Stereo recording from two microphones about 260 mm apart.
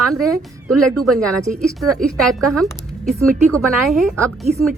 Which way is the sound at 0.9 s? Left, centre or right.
Right.